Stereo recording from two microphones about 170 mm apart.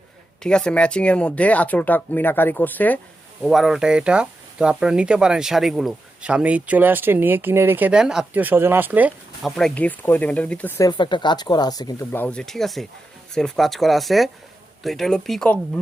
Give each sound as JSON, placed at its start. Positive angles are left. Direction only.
{"t": 0.4, "sound": "speech", "side_deg": 5}
{"t": 3.4, "sound": "speech", "side_deg": 0}
{"t": 9.6, "sound": "speech", "side_deg": 5}
{"t": 12.1, "sound": "speech", "side_deg": 10}